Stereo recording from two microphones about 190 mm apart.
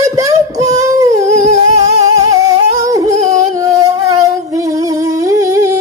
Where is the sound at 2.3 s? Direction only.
20° right (ahead or behind).